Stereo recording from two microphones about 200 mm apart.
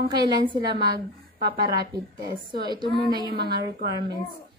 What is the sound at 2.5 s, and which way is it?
A woman's voice, 20° right (ahead or behind).